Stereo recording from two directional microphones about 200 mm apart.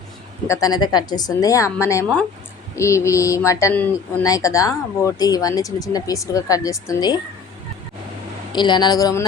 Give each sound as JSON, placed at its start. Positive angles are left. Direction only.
{"t": 0.4, "sound": "speech", "side_deg": 15}
{"t": 8.5, "sound": "speech", "side_deg": 20}